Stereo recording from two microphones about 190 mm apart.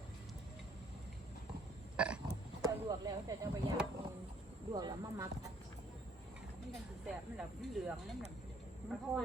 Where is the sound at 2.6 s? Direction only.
20° right (ahead or behind).